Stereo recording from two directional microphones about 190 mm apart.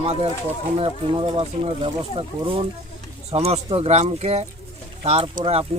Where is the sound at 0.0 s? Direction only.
30° right (ahead or behind).